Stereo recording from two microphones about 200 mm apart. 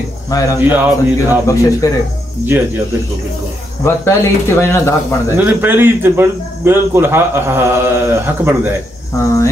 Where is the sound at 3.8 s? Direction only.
10° left (ahead or behind).